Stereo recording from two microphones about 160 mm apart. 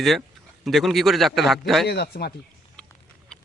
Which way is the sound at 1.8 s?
85° left.